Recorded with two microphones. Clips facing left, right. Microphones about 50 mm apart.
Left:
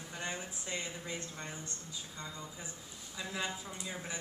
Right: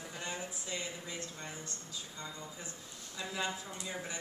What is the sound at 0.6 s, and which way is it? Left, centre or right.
Speech, left.